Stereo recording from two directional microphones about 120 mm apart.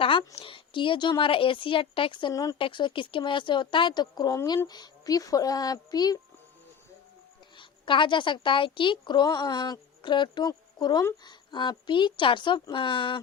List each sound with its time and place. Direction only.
0.0 s a woman's voice: 45° left (ahead or behind)
2.3 s speech: 30° left (ahead or behind)
2.6 s a woman's voice: 45° left (ahead or behind)
7.5 s a woman's voice: 45° left (ahead or behind)